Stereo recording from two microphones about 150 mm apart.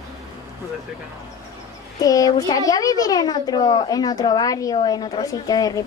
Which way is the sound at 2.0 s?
25° left (ahead or behind).